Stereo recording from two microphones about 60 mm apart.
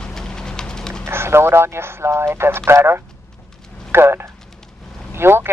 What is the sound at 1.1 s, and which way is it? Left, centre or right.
Speech, right.